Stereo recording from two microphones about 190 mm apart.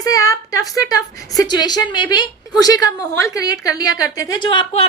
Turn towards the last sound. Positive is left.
turn(degrees=30)  # may be behind; listen again after turning